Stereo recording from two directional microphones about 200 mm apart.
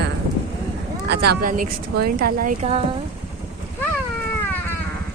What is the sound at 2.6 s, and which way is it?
Vehicle, 30° right (ahead or behind).